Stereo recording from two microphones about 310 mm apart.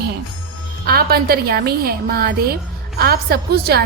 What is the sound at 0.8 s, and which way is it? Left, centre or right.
A woman's voice, right.